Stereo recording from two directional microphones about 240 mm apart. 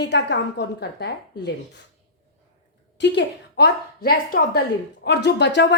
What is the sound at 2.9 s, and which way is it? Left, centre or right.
Speech, left.